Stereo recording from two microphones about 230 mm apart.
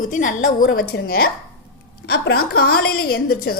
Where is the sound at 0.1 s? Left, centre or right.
Left.